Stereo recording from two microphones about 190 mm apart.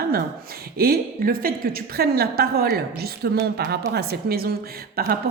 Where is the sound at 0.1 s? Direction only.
55° right (ahead or behind).